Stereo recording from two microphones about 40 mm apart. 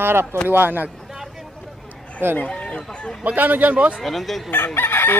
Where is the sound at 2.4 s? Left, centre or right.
Left.